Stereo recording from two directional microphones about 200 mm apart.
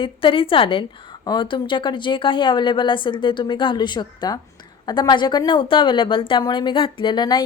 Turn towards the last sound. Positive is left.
turn(degrees=20)  # may be behind; listen again after turning